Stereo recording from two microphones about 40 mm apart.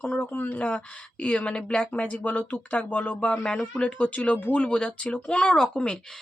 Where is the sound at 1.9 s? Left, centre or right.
Left.